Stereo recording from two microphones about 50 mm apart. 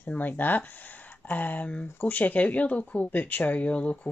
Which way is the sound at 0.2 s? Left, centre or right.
Left.